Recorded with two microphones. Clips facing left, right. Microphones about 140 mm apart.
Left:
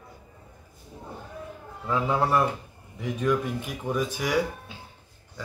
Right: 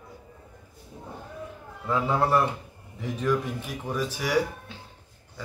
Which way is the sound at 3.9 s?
5° right (ahead or behind).